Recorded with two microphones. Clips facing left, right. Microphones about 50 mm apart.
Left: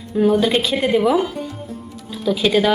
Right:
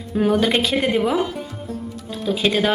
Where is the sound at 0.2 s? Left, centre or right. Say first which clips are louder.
Left 2 dB; right.